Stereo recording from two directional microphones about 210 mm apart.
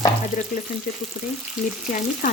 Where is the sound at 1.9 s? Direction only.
40° left (ahead or behind).